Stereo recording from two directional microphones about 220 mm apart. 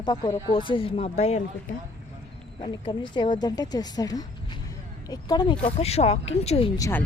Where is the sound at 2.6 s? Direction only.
20° left (ahead or behind).